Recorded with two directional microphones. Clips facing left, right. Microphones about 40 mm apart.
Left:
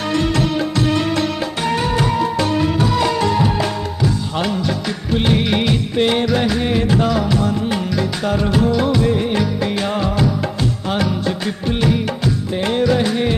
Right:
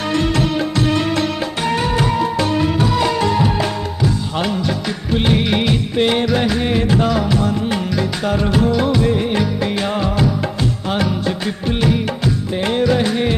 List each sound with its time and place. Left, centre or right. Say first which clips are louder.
0.0 s music: even; right
8.8 s music of bollywood: even; right
10.9 s music: even; right
12.6 s music: even; right